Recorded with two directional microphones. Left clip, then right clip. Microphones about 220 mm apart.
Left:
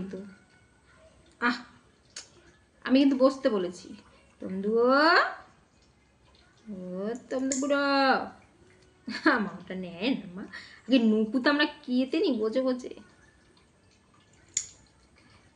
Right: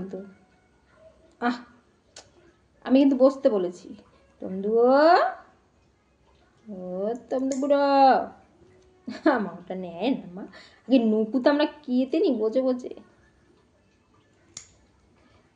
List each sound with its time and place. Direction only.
2.1 s tick-tock: 20° left (ahead or behind)
2.8 s a woman's voice: 25° left (ahead or behind)
7.0 s a woman's voice: 25° left (ahead or behind)